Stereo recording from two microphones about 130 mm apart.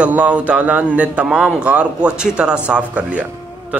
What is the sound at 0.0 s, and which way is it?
A man's voice, 10° right (ahead or behind).